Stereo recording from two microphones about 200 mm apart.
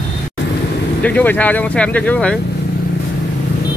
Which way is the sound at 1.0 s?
10° left (ahead or behind).